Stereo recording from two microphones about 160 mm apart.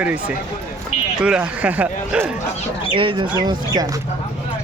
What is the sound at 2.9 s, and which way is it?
Speech, 30° right (ahead or behind).